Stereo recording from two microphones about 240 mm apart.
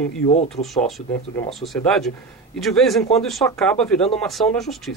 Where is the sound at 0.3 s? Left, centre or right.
Left.